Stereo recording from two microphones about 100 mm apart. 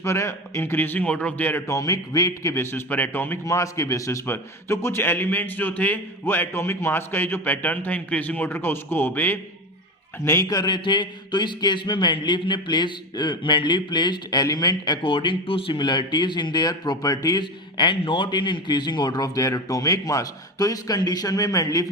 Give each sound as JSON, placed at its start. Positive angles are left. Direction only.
{"t": 0.0, "sound": "a man's voice", "side_deg": 30}
{"t": 3.4, "sound": "a man's voice", "side_deg": 30}
{"t": 10.2, "sound": "a man's voice", "side_deg": 35}
{"t": 15.0, "sound": "a man's voice", "side_deg": 55}